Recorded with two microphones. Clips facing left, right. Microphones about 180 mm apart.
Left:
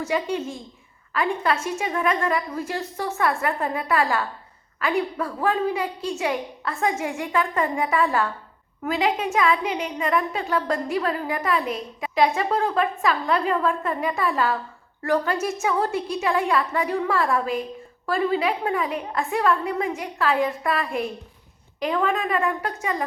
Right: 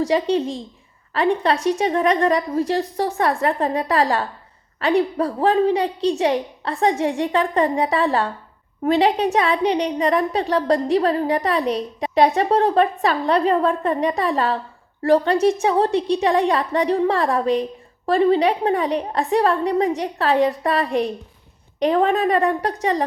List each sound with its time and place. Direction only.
0.0 s a woman's voice: 35° right (ahead or behind)